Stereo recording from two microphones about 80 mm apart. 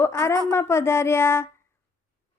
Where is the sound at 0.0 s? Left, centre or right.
Left.